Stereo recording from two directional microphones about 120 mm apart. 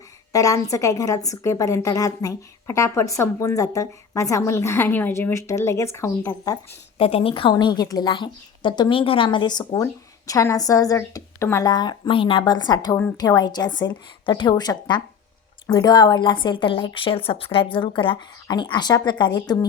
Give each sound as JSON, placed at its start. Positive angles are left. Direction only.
{"t": 0.3, "sound": "a woman's voice", "side_deg": 30}
{"t": 7.0, "sound": "speech", "side_deg": 50}
{"t": 7.5, "sound": "a woman's voice", "side_deg": 35}
{"t": 9.8, "sound": "a woman's voice", "side_deg": 25}
{"t": 11.7, "sound": "a woman's voice", "side_deg": 35}